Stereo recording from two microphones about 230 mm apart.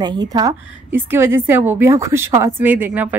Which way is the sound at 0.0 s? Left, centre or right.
Centre.